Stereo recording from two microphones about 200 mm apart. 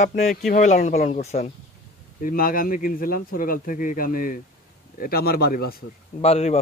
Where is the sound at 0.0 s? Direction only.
40° left (ahead or behind).